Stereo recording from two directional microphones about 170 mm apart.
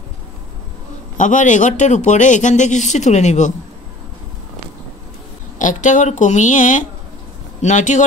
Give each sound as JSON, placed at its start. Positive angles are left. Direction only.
{"t": 1.1, "sound": "a man's voice", "side_deg": 50}
{"t": 5.6, "sound": "a man's voice", "side_deg": 50}